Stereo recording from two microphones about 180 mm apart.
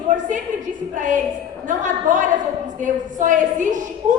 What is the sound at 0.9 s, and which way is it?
A woman's voice, 45° right (ahead or behind).